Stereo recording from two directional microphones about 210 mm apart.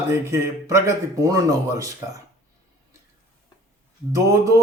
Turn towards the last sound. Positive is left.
turn(degrees=-15)  # may be behind; listen again after turning